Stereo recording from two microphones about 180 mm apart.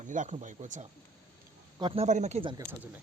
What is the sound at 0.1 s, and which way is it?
Speech, 45° right (ahead or behind).